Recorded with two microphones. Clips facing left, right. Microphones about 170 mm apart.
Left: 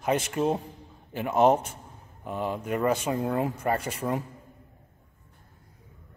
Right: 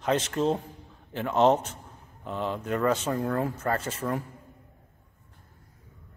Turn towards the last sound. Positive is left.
turn(degrees=15)  # may be behind; listen again after turning